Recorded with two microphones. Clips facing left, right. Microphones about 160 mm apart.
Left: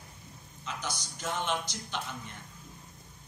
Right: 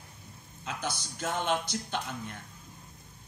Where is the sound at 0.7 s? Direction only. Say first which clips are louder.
Right 4 dB; 55° right (ahead or behind).